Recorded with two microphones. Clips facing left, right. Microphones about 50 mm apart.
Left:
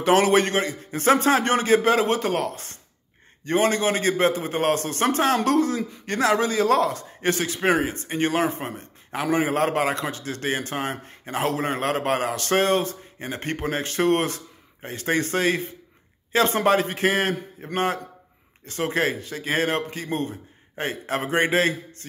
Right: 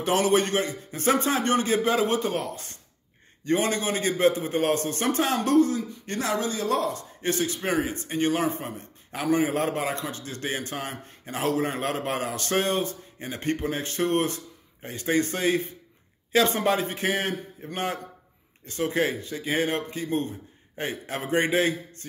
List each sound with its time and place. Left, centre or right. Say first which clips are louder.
0.0 s a man's voice: left 4 dB; left
1.8 s a man's voice: left 3 dB; left
7.6 s a man's voice: left 9 dB; left
20.7 s a man's voice: left 4 dB; left